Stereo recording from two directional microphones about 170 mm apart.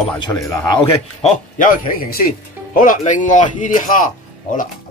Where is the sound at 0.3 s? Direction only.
20° left (ahead or behind).